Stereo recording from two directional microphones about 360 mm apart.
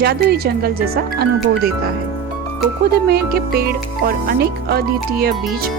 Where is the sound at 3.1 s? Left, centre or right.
Right.